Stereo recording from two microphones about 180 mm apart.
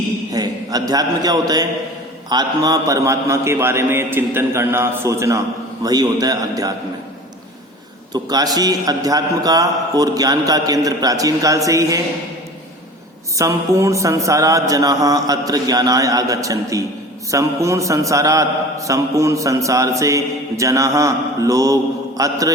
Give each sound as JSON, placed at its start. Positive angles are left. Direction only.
{"t": 0.3, "sound": "a man's voice", "side_deg": -20}
{"t": 8.1, "sound": "a man's voice", "side_deg": -20}
{"t": 13.3, "sound": "a man's voice", "side_deg": -15}